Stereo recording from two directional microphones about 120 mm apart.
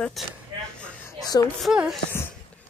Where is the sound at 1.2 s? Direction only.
35° left (ahead or behind).